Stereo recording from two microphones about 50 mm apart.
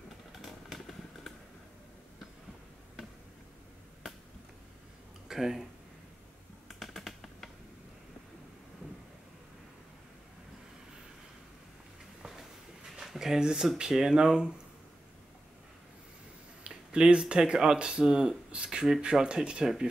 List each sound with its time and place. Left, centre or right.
0.4 s vehicle: centre
5.3 s speech: centre
6.7 s finger snapping: centre
12.2 s a sound: centre
13.0 s speech: centre
16.6 s speech: centre